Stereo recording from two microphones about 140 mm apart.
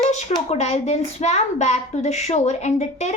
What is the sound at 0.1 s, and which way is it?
A child's voice, 50° left (ahead or behind).